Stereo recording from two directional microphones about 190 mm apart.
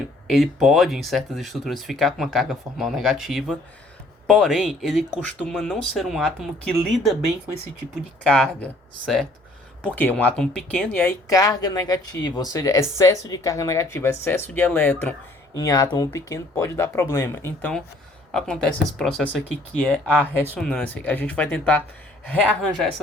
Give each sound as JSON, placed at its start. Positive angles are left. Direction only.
{"t": 0.3, "sound": "speech", "side_deg": 0}
{"t": 8.2, "sound": "speech", "side_deg": 5}
{"t": 11.3, "sound": "speech", "side_deg": 20}
{"t": 15.5, "sound": "speech", "side_deg": 20}
{"t": 20.1, "sound": "speech", "side_deg": -10}
{"t": 20.6, "sound": "speech", "side_deg": 5}